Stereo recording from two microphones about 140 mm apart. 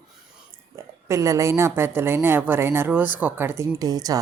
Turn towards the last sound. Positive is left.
turn(degrees=-25)  # may be behind; listen again after turning